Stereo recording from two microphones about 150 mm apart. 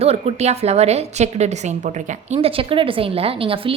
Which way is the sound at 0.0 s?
45° right (ahead or behind).